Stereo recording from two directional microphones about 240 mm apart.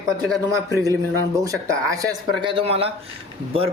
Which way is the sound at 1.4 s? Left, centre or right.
Centre.